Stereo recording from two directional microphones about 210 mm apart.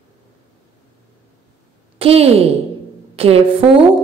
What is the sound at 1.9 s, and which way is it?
A woman's voice, 30° right (ahead or behind).